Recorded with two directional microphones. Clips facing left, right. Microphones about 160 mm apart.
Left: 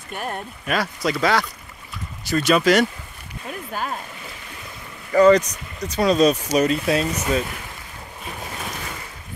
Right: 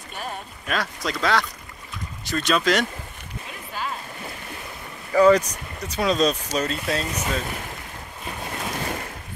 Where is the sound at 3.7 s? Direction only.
45° left (ahead or behind).